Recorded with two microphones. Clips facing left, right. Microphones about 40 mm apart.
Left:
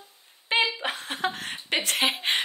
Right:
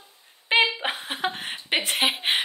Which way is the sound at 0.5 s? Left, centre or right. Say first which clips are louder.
Right 3 dB; right.